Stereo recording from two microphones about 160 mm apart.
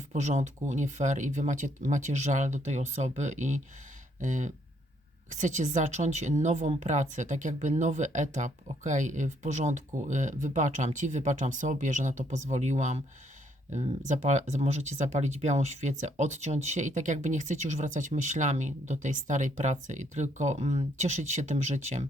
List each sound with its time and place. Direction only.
0.1 s speech: 45° right (ahead or behind)